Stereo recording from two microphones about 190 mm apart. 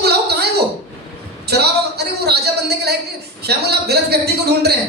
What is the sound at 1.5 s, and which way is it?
A man's voice, 60° right (ahead or behind).